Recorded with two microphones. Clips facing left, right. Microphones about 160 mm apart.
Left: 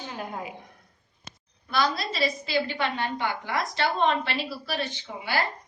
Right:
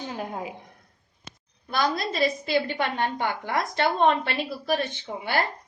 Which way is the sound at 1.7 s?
50° right (ahead or behind).